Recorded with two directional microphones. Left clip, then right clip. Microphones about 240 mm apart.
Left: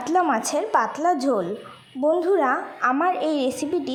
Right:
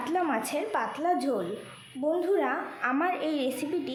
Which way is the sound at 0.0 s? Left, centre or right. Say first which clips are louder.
Left 8 dB; left.